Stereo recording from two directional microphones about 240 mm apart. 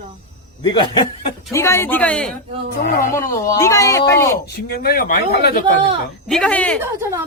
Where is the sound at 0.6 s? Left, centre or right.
Centre.